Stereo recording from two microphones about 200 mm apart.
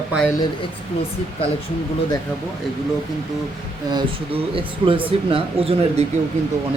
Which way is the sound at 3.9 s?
25° right (ahead or behind).